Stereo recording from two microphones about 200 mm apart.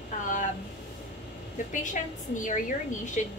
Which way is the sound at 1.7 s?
40° left (ahead or behind).